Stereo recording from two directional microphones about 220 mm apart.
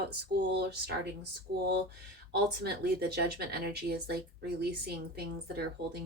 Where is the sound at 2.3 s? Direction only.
45° right (ahead or behind).